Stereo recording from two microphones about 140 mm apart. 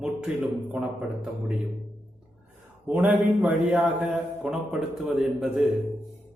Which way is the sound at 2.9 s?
10° right (ahead or behind).